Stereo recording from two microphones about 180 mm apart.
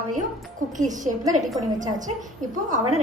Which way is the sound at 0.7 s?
45° right (ahead or behind).